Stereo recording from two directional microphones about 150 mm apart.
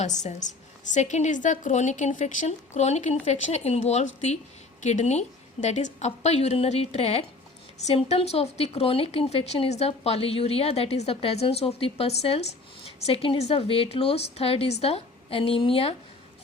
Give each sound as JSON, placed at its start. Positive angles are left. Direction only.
{"t": 0.0, "sound": "a woman's voice", "side_deg": 50}